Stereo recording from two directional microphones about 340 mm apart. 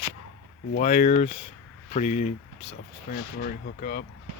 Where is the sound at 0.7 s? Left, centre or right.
Left.